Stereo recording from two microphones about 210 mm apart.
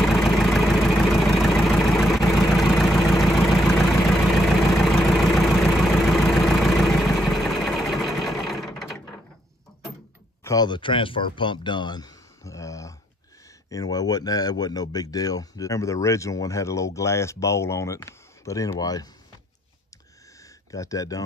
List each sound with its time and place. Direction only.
0.0 s vehicle: centre (ahead or behind)
10.4 s speech: 20° left (ahead or behind)
20.7 s speech: 15° left (ahead or behind)